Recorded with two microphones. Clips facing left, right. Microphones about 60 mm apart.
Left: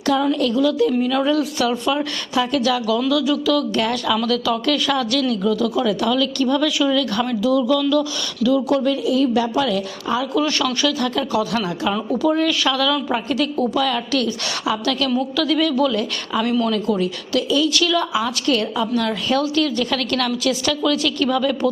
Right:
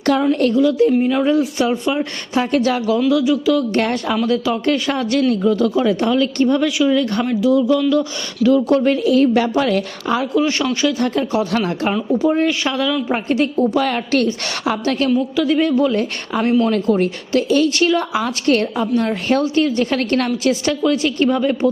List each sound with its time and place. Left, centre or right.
0.2 s a man's voice: right
0.5 s a woman's voice: right
2.4 s a man's voice: right
3.1 s a woman's voice: right
3.8 s a man's voice: right
4.2 s a man's voice: right
8.4 s a woman's voice: right
10.3 s a man's voice: right
12.2 s a woman's voice: right
13.7 s a man's voice: right
14.8 s a man's voice: right